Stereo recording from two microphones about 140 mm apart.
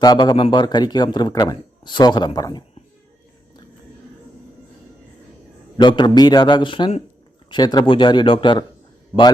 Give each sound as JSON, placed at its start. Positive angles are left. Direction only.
{"t": 0.0, "sound": "a man's voice", "side_deg": 30}
{"t": 5.7, "sound": "speech", "side_deg": 35}